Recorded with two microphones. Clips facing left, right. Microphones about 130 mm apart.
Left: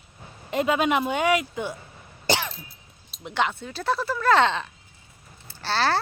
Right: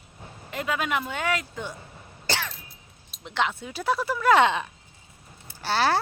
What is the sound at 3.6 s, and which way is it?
A child's voice, 10° right (ahead or behind).